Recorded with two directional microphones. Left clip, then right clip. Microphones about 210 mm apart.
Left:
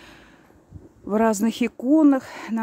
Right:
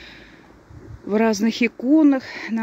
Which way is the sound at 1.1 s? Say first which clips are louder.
Right 1 dB; 15° left (ahead or behind).